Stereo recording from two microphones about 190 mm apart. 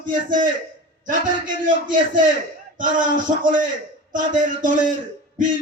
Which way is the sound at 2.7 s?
45° right (ahead or behind).